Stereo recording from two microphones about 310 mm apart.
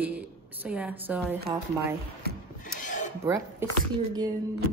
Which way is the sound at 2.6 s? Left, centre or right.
Left.